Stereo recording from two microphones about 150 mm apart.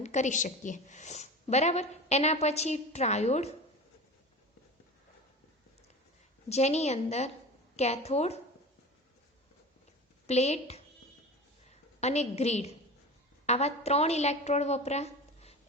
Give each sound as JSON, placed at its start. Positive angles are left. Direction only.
{"t": 0.0, "sound": "a woman's voice", "side_deg": 50}
{"t": 6.5, "sound": "a woman's voice", "side_deg": 45}
{"t": 10.2, "sound": "a woman's voice", "side_deg": 45}